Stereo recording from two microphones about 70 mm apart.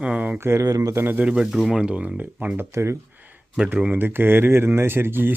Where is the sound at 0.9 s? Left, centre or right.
Right.